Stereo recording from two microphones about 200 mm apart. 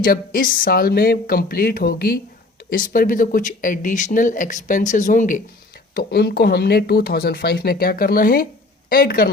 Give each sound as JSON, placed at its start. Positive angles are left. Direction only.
{"t": 0.0, "sound": "speech", "side_deg": 45}
{"t": 5.9, "sound": "speech", "side_deg": 55}